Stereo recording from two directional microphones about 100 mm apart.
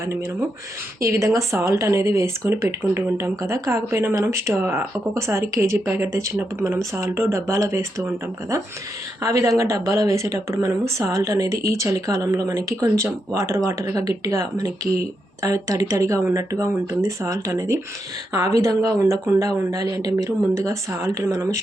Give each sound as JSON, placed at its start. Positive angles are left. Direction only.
{"t": 1.0, "sound": "speech", "side_deg": -30}
{"t": 9.2, "sound": "speech", "side_deg": -35}